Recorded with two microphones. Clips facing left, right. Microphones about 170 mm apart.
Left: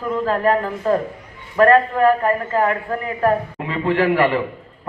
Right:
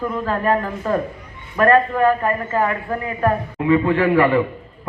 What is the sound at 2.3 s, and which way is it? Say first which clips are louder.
A man's voice: left 2 dB; 30° left (ahead or behind).